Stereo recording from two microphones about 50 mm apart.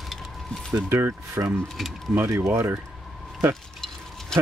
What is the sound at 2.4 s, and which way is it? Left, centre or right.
Speech, right.